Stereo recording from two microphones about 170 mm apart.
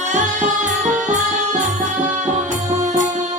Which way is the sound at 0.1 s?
45° right (ahead or behind).